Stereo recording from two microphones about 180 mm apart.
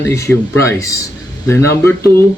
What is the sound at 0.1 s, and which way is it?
A man's voice, 15° left (ahead or behind).